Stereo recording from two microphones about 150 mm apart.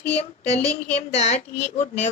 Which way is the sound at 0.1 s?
45° left (ahead or behind).